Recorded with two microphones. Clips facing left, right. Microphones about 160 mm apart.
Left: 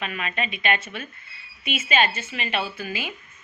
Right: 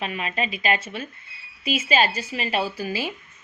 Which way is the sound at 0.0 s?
30° right (ahead or behind).